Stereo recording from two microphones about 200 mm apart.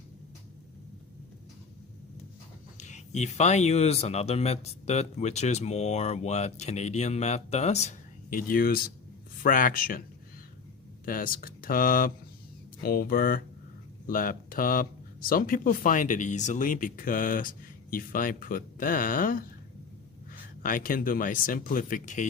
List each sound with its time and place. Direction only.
2.7 s speech: 35° left (ahead or behind)
11.0 s speech: 45° left (ahead or behind)
20.6 s speech: 45° left (ahead or behind)